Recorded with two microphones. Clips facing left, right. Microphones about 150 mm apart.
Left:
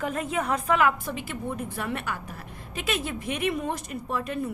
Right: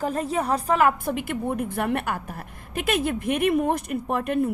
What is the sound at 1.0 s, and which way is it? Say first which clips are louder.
A woman's voice: right 6 dB; 55° right (ahead or behind).